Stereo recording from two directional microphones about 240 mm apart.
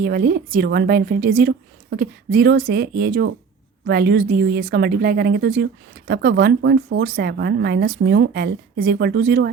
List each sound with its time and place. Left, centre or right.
0.0 s a woman's voice: right